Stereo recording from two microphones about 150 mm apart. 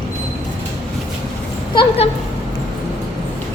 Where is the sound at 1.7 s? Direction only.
40° left (ahead or behind).